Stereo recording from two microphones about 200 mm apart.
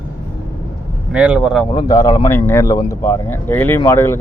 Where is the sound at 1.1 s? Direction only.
5° right (ahead or behind).